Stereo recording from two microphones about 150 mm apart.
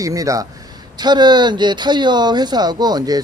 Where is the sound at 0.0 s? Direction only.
20° right (ahead or behind).